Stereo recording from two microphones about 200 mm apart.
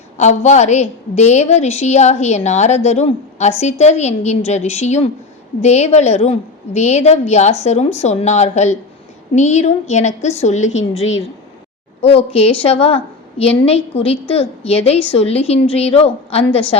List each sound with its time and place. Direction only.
0.4 s a woman's voice: 35° left (ahead or behind)